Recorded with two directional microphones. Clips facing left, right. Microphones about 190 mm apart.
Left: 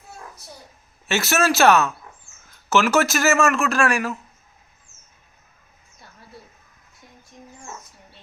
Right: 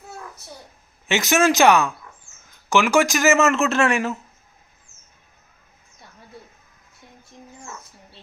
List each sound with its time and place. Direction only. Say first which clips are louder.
1.0 s speech: right 2 dB; 15° right (ahead or behind)